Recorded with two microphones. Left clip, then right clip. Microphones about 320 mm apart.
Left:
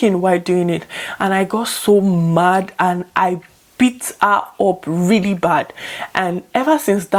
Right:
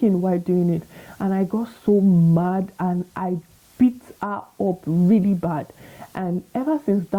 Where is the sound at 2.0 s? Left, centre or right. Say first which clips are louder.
Left 4 dB; centre.